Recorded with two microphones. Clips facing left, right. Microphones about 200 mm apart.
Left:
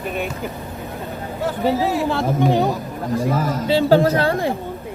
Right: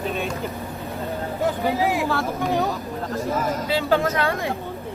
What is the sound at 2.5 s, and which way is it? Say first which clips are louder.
Speech: left 4 dB; 15° left (ahead or behind).